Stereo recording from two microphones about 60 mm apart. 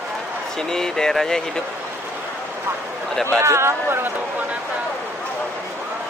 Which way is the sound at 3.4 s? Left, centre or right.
Right.